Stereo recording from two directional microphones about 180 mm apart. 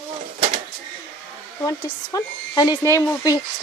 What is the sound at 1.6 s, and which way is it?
Speech, 20° left (ahead or behind).